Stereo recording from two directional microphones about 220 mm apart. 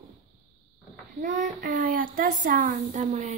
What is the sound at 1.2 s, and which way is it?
Speech, 35° right (ahead or behind).